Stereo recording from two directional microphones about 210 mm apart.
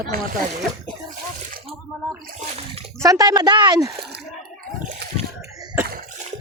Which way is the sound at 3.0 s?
15° right (ahead or behind).